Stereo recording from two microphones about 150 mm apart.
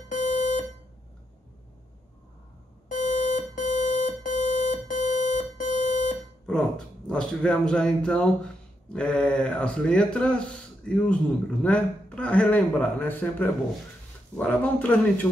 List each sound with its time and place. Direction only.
0.1 s smoke detector: 60° left (ahead or behind)
2.9 s alarm clock: 55° left (ahead or behind)
7.1 s a man's voice: 5° left (ahead or behind)